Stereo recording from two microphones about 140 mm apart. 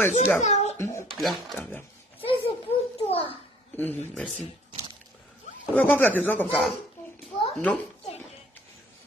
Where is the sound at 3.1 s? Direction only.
40° left (ahead or behind).